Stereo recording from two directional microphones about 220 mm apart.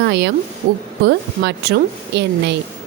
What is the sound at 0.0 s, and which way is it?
Speech, 50° right (ahead or behind).